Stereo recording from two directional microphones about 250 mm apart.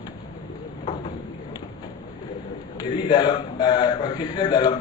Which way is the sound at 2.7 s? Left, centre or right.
Centre.